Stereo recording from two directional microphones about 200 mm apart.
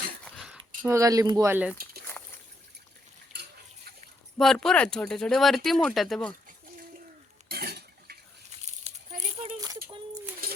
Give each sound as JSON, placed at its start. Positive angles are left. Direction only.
{"t": 0.3, "sound": "a sound", "side_deg": 0}
{"t": 0.8, "sound": "speech", "side_deg": -15}
{"t": 2.2, "sound": "trickle", "side_deg": 10}
{"t": 4.4, "sound": "speech", "side_deg": 0}
{"t": 7.4, "sound": "cutlery", "side_deg": -50}
{"t": 8.9, "sound": "a sound", "side_deg": -30}